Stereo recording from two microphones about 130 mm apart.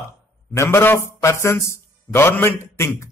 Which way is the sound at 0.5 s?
20° left (ahead or behind).